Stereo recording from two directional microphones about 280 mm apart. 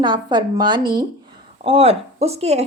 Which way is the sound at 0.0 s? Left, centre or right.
Centre.